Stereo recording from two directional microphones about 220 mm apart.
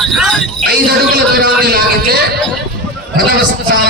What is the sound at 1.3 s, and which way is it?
Speech, 45° right (ahead or behind).